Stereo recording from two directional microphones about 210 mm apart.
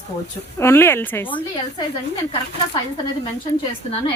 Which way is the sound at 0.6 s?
10° left (ahead or behind).